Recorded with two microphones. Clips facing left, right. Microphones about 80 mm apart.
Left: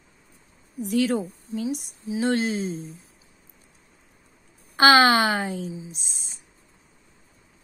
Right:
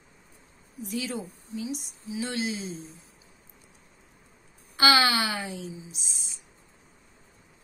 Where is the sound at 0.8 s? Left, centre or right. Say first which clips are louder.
Left 10 dB; left.